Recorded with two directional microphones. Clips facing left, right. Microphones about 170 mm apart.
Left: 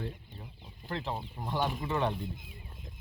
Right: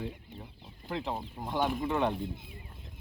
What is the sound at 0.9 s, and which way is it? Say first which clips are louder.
Speech: right 1 dB; 10° right (ahead or behind).